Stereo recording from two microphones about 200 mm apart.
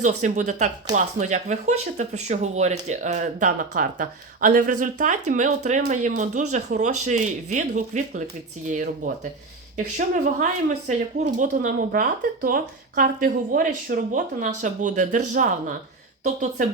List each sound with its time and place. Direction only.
0.0 s speech: 40° right (ahead or behind)
10.4 s speech: 35° right (ahead or behind)